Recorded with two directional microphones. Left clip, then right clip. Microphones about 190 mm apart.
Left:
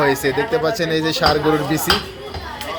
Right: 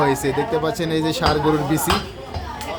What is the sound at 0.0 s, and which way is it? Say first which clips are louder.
Speech: left 2 dB; 10° right (ahead or behind).